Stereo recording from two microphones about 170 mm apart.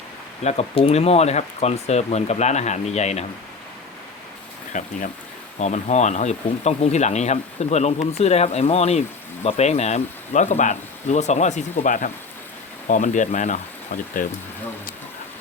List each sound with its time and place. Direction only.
0.4 s speech: 35° left (ahead or behind)
4.7 s speech: 50° left (ahead or behind)